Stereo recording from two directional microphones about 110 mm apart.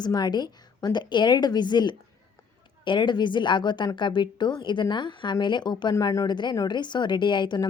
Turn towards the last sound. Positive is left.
turn(degrees=45)  # may be behind; listen again after turning